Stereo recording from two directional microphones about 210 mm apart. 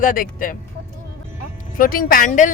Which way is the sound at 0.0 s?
40° left (ahead or behind).